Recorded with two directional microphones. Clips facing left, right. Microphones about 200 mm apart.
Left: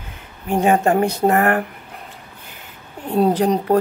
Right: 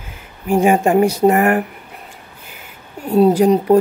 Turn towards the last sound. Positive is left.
turn(degrees=-5)  # may be behind; listen again after turning